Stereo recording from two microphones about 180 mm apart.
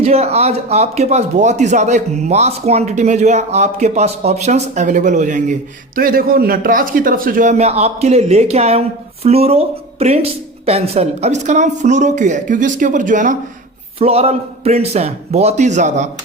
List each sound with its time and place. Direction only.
0.0 s speech: 35° right (ahead or behind)
14.0 s speech: 35° right (ahead or behind)